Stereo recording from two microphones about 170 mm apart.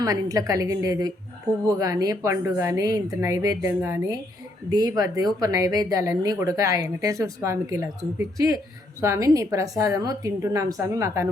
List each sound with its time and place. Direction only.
0.0 s speech: 20° right (ahead or behind)